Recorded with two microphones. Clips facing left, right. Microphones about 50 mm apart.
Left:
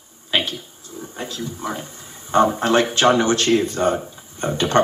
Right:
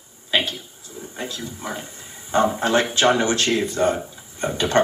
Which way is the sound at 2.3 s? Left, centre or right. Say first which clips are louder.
Left 3 dB; left.